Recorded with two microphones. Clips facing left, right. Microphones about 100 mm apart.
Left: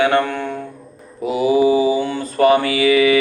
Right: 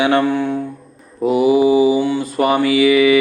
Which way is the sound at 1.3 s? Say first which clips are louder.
Right 2 dB; 20° right (ahead or behind).